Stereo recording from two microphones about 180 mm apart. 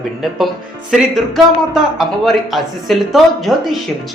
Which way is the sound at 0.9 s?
Centre (ahead or behind).